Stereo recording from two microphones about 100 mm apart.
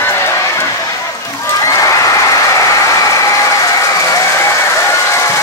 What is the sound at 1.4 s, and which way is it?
Applause, 30° left (ahead or behind).